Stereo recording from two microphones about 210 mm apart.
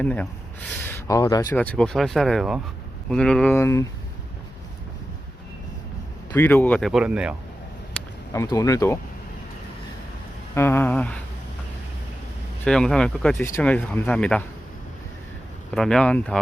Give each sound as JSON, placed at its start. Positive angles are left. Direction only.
{"t": 0.0, "sound": "speech", "side_deg": 5}
{"t": 1.5, "sound": "speech", "side_deg": 5}
{"t": 6.3, "sound": "speech", "side_deg": 10}
{"t": 8.3, "sound": "speech", "side_deg": 15}
{"t": 10.5, "sound": "speech", "side_deg": 10}
{"t": 12.6, "sound": "speech", "side_deg": 5}
{"t": 15.7, "sound": "speech", "side_deg": 5}